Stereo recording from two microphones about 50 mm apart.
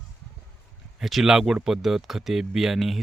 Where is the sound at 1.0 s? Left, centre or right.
Centre.